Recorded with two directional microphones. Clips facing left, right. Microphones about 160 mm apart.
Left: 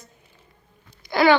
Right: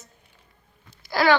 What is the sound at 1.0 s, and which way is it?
Wail, centre (ahead or behind).